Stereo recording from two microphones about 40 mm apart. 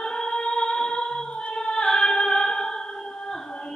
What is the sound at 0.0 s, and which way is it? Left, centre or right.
Music, centre.